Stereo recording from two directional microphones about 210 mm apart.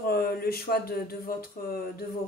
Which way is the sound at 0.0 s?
45° left (ahead or behind).